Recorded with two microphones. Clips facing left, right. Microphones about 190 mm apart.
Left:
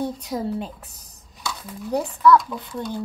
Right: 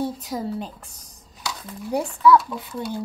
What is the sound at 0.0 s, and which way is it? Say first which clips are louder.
Speech: left 1 dB; centre (ahead or behind).